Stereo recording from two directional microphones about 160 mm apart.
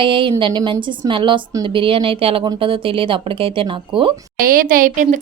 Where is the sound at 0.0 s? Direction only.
35° right (ahead or behind).